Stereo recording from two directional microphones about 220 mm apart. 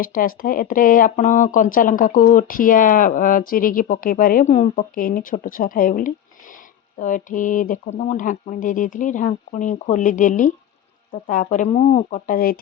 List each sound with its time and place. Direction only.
0.0 s speech: 40° left (ahead or behind)